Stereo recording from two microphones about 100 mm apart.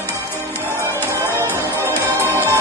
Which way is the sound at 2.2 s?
25° right (ahead or behind).